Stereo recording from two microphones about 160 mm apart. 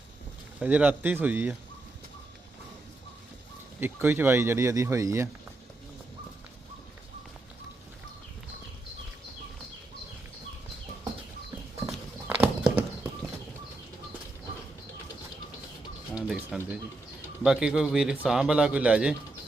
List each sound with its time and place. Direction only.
0.6 s speech: 10° right (ahead or behind)
3.8 s speech: 15° right (ahead or behind)
11.9 s horse: 5° right (ahead or behind)
16.1 s music: 5° right (ahead or behind)
17.4 s a man's voice: 5° right (ahead or behind)